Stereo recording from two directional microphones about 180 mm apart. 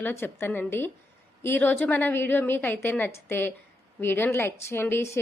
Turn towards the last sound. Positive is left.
turn(degrees=15)  # may be behind; listen again after turning